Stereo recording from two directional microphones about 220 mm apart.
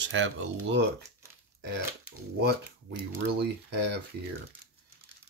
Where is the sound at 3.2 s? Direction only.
50° right (ahead or behind).